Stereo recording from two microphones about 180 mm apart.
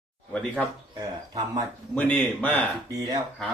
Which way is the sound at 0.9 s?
20° right (ahead or behind).